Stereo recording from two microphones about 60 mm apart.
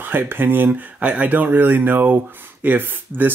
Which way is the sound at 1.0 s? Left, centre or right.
Right.